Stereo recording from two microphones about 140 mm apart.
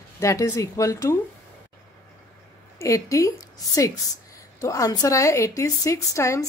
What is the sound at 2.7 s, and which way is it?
Speech, 20° left (ahead or behind).